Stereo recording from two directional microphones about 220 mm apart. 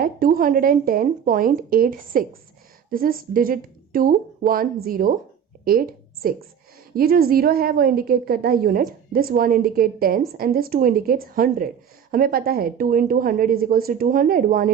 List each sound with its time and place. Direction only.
0.0 s a woman's voice: 40° right (ahead or behind)